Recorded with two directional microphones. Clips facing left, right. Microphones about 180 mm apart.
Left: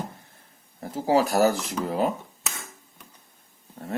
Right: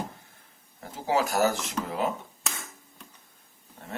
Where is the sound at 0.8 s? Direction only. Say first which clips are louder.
Left 5 dB; 35° left (ahead or behind).